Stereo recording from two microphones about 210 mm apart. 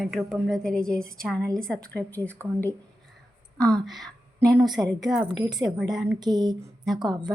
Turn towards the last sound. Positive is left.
turn(degrees=-20)  # may be behind; listen again after turning